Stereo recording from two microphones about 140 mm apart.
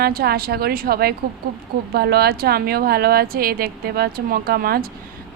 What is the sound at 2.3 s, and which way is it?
Speech, 90° right.